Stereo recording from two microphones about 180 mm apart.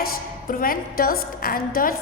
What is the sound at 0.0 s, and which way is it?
A woman's voice, 50° left (ahead or behind).